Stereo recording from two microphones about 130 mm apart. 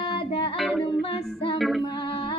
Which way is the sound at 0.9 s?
45° left (ahead or behind).